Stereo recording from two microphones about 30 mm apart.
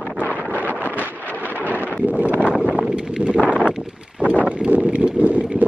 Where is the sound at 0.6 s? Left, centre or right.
Left.